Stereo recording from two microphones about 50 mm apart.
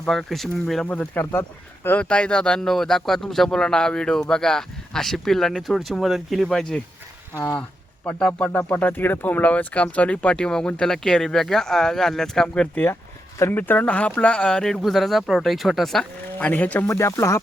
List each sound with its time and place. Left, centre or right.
0.0 s speech: centre
0.9 s speech: left
1.2 s speech: left
2.0 s speech: left
2.6 s a man's voice: centre
8.5 s speech: left
9.0 s speech: left
9.5 s a man's voice: left; by 12.6 s centre
12.7 s speech: left
13.8 s speech: left
14.8 s speech: centre
16.4 s speech: left
16.9 s speech: left